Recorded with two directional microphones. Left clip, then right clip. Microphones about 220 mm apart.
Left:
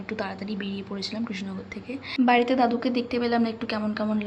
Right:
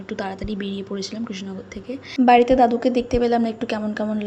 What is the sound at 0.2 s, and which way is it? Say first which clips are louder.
A woman's voice: right 6 dB; 15° right (ahead or behind).